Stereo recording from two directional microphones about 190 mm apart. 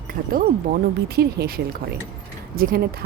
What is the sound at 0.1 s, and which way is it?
Speech, 50° right (ahead or behind).